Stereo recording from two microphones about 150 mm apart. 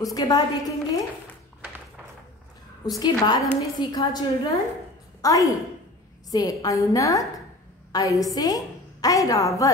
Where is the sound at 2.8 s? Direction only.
25° left (ahead or behind).